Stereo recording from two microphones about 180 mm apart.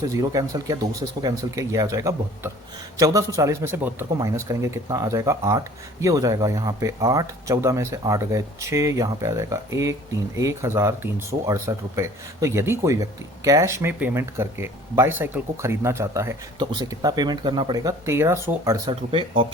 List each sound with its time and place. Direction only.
0.1 s speech: 20° right (ahead or behind)